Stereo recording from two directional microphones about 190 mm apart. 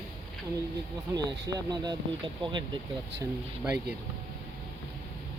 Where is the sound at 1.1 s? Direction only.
20° right (ahead or behind).